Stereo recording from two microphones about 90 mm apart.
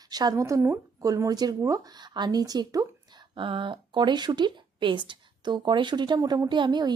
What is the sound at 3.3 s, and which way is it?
A woman's voice, 65° right (ahead or behind).